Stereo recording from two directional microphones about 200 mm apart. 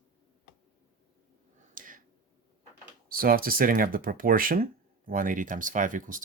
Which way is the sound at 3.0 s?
45° right (ahead or behind).